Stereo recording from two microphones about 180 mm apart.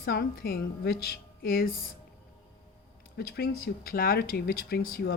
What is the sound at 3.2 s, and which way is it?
Speech, 60° left (ahead or behind).